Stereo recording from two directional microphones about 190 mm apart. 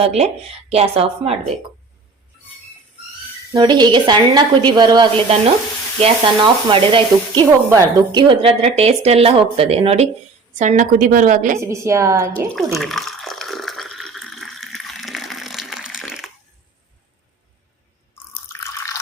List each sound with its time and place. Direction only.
0.0 s sizzle: 35° right (ahead or behind)
3.5 s a woman's voice: 25° right (ahead or behind)
6.0 s sizzle: 25° right (ahead or behind)
10.6 s a woman's voice: 40° right (ahead or behind)
11.6 s a woman's voice: 15° right (ahead or behind)
12.5 s water: centre (ahead or behind)
18.1 s drip: 15° left (ahead or behind)